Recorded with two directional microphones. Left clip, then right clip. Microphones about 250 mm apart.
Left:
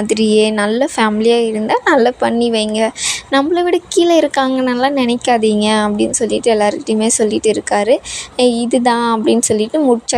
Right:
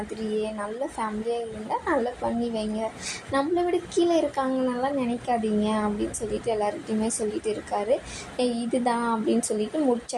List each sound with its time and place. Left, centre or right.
0.1 s a woman's voice: left